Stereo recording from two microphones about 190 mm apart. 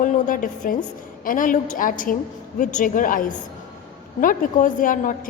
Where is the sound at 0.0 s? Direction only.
45° left (ahead or behind).